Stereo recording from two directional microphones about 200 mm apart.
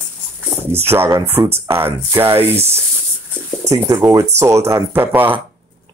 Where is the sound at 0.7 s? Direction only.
10° right (ahead or behind).